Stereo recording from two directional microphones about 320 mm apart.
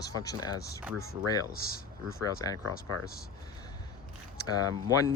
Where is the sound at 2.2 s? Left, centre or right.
Centre.